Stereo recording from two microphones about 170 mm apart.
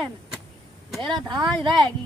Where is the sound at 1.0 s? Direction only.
25° right (ahead or behind).